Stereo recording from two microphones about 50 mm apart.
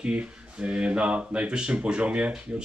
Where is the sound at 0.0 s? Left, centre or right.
Right.